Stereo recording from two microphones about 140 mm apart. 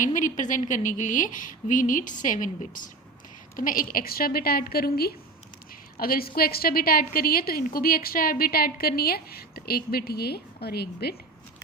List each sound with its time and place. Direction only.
0.0 s a woman's voice: 65° left (ahead or behind)
3.5 s a woman's voice: 80° left